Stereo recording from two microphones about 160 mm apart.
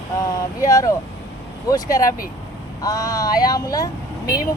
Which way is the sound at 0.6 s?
20° left (ahead or behind).